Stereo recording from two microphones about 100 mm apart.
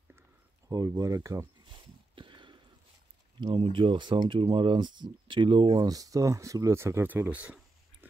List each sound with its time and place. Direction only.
0.7 s speech: 35° right (ahead or behind)
1.7 s a sound: 55° right (ahead or behind)
3.3 s speech: 50° right (ahead or behind)
5.9 s speech: 35° right (ahead or behind); by 7.5 s 15° right (ahead or behind)